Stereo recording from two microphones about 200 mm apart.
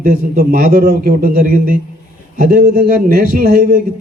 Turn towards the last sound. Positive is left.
turn(degrees=-50)  # may be behind; listen again after turning